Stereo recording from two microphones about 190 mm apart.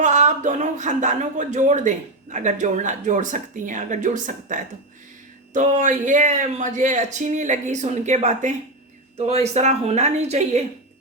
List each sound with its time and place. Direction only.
0.0 s speech: 40° right (ahead or behind)